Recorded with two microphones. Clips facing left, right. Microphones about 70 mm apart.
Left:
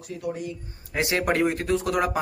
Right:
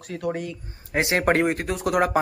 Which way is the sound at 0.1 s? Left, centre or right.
Right.